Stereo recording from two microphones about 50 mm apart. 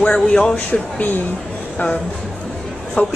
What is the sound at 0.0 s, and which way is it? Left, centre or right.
Speech, centre.